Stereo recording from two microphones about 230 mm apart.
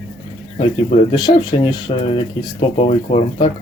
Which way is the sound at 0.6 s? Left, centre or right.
Left.